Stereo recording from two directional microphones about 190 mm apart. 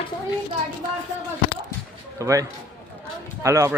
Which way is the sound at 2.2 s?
15° right (ahead or behind).